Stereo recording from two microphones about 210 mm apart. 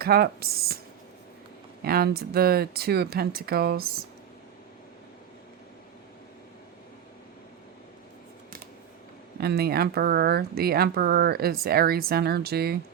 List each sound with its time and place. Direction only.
0.0 s speech: 50° right (ahead or behind)
1.8 s speech: 45° right (ahead or behind)
9.4 s speech: 50° right (ahead or behind)